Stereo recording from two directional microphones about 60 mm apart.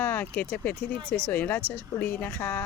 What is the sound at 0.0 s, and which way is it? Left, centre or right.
Speech, left.